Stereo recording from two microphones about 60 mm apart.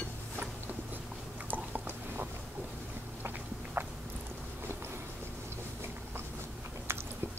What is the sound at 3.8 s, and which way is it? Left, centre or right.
Biting, right.